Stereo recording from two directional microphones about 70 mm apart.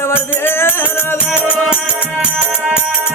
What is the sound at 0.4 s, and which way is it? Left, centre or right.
Music, left.